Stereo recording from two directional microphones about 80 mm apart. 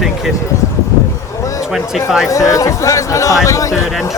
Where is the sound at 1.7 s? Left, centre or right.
Centre.